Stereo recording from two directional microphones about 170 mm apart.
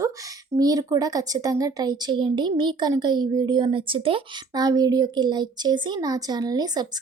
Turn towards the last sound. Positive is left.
turn(degrees=-25)  # may be behind; listen again after turning